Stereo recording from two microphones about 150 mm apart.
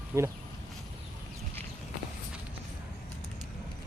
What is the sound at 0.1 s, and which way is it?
Speech, 15° right (ahead or behind).